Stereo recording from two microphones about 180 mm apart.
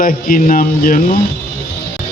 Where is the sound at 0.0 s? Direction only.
50° left (ahead or behind).